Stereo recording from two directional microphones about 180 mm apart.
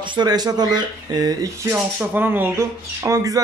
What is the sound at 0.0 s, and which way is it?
Speech, 25° right (ahead or behind).